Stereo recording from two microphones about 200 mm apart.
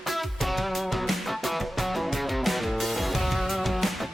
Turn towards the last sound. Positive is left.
turn(degrees=0)  # may be behind; listen again after turning